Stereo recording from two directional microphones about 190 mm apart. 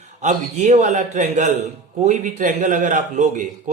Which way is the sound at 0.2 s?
40° right (ahead or behind).